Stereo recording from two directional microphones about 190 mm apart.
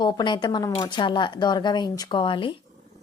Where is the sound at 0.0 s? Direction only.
25° left (ahead or behind).